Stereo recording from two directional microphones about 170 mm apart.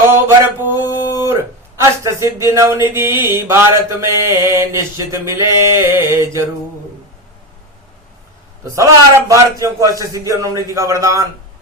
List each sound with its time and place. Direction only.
0.1 s mantra: 10° right (ahead or behind)
1.2 s speech: 15° right (ahead or behind)
3.1 s mantra: 25° left (ahead or behind)
3.3 s mantra: 15° right (ahead or behind)
8.6 s mantra: 15° right (ahead or behind)
9.3 s a man's voice: 20° right (ahead or behind)